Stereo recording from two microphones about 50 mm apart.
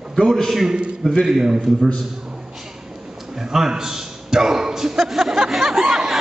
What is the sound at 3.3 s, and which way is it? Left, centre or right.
A man's voice, centre.